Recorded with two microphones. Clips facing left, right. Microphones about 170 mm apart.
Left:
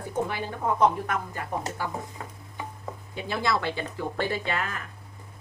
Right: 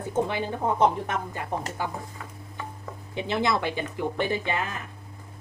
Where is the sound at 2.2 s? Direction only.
30° left (ahead or behind).